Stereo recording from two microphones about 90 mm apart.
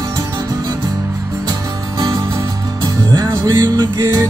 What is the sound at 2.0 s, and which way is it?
Music, 40° right (ahead or behind).